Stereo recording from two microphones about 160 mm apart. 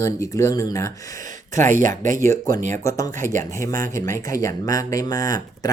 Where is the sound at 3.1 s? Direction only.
55° right (ahead or behind).